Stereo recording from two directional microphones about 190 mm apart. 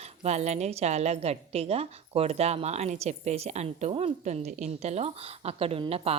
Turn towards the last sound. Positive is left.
turn(degrees=-30)  # may be behind; listen again after turning